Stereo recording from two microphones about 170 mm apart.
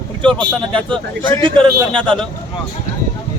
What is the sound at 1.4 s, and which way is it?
Speech, 30° right (ahead or behind).